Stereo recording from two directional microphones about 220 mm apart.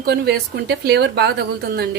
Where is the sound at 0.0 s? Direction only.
45° right (ahead or behind).